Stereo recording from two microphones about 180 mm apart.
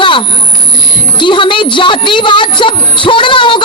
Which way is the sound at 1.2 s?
25° left (ahead or behind).